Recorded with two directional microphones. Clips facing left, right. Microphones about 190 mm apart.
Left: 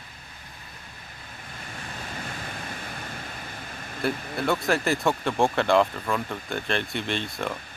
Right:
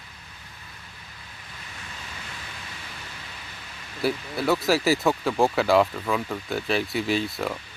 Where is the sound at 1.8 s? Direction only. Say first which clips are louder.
Left 6 dB; 50° left (ahead or behind).